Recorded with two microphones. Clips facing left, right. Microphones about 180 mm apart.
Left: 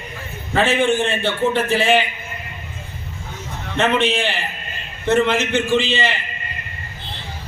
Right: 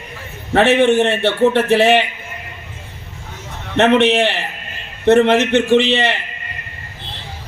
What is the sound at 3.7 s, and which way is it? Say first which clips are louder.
A man's voice: right 6 dB; 70° right (ahead or behind).